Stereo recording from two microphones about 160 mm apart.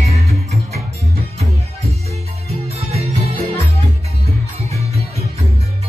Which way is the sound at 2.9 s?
40° right (ahead or behind).